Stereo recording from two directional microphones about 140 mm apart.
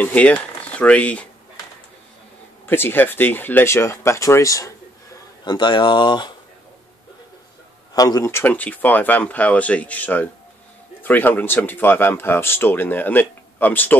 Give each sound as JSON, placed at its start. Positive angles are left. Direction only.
{"t": 0.0, "sound": "speech", "side_deg": 10}
{"t": 2.6, "sound": "speech", "side_deg": 15}
{"t": 7.9, "sound": "speech", "side_deg": 25}